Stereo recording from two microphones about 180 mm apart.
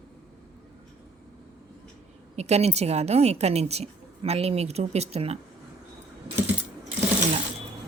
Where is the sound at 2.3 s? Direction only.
35° right (ahead or behind).